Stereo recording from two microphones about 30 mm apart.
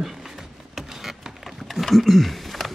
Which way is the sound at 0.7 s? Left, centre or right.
Centre.